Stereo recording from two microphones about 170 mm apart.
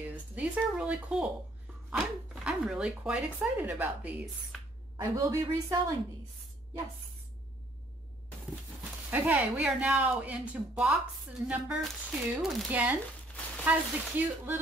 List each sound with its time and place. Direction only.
0.0 s speech: 10° right (ahead or behind)
4.9 s a woman's voice: 20° right (ahead or behind)
9.1 s speech: 10° right (ahead or behind)